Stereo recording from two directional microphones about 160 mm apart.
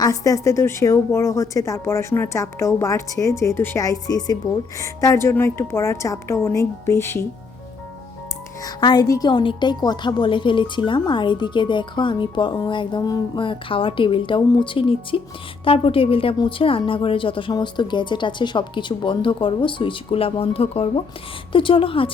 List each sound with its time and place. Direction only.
0.0 s a woman's voice: 20° left (ahead or behind)
8.6 s a woman's voice: 25° left (ahead or behind)